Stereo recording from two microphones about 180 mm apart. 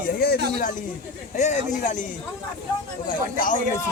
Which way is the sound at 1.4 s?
45° left (ahead or behind).